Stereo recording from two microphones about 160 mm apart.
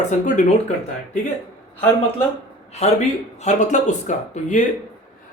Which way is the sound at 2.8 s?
45° left (ahead or behind).